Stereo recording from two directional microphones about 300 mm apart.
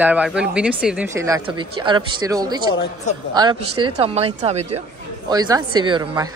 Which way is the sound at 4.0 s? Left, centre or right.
Centre.